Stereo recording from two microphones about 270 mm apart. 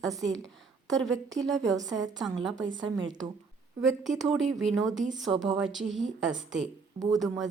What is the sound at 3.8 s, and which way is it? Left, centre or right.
Speech, centre.